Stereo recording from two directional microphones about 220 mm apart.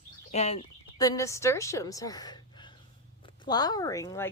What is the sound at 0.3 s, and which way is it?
Speech, 30° left (ahead or behind).